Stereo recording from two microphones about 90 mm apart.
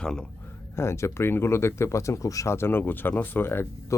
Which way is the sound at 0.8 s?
30° left (ahead or behind).